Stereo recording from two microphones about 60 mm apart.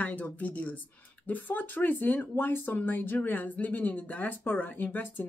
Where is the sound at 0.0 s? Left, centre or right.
Left.